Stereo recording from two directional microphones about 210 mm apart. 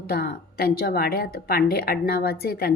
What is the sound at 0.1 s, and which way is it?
A woman's voice, 45° left (ahead or behind).